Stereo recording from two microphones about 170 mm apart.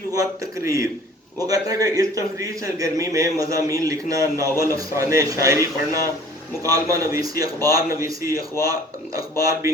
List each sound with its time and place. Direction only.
0.1 s speech: 20° right (ahead or behind)